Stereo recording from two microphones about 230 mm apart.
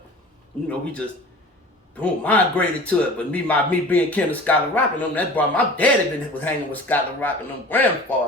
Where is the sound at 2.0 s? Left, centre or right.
Centre.